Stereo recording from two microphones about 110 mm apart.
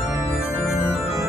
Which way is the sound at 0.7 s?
Centre (ahead or behind).